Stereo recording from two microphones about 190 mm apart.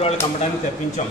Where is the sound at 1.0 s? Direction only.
40° left (ahead or behind).